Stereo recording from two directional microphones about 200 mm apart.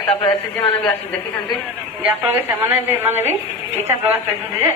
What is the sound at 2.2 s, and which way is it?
A woman's voice, 10° right (ahead or behind).